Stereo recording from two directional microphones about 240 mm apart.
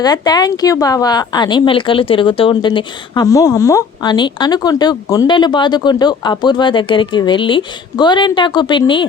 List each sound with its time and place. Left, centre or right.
0.0 s a woman's voice: centre